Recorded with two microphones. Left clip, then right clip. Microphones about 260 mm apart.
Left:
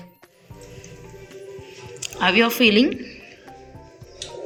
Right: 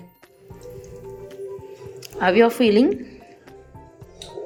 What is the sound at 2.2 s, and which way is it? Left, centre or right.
Speech, centre.